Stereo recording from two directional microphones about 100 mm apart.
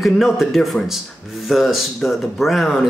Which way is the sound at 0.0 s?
Centre (ahead or behind).